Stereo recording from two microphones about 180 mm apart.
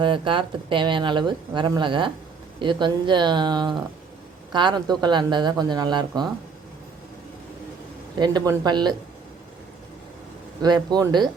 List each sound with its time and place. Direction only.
0.0 s speech: 25° right (ahead or behind)
8.1 s speech: 20° right (ahead or behind)
10.6 s speech: 20° right (ahead or behind)